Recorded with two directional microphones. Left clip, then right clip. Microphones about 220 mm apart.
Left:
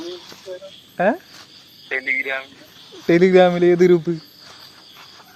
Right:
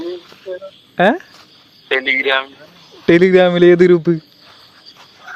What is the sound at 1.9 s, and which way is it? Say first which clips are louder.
Speech: right 7 dB; 55° right (ahead or behind).